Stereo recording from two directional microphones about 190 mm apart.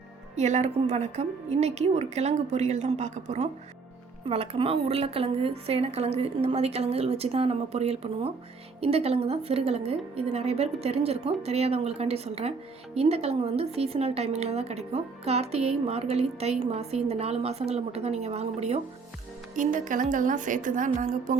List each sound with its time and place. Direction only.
0.3 s a woman's voice: 35° right (ahead or behind)